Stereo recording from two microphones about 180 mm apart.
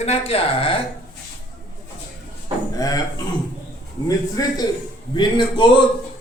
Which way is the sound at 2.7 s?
20° left (ahead or behind).